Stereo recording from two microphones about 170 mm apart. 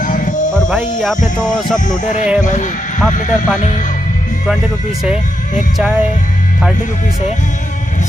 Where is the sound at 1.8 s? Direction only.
45° left (ahead or behind).